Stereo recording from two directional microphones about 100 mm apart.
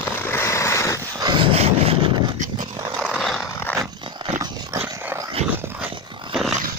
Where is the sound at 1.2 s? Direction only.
55° right (ahead or behind); by 2.1 s 80° right.